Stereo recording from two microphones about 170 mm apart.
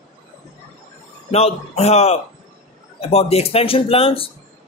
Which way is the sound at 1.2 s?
35° left (ahead or behind).